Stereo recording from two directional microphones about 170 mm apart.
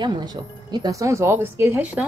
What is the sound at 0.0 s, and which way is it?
Speech, 25° right (ahead or behind).